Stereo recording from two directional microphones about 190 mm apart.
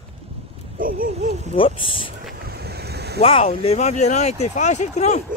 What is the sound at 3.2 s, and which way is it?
Speech, 30° left (ahead or behind).